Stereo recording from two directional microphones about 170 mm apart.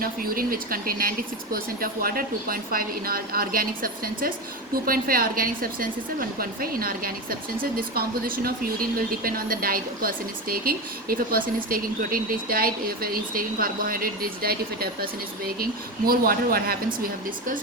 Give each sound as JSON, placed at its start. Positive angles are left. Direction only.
{"t": 0.0, "sound": "a woman's voice", "side_deg": -60}